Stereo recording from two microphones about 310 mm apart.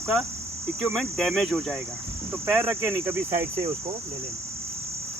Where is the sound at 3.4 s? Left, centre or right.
Centre.